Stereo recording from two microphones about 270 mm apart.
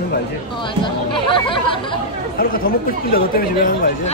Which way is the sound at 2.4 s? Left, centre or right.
Left.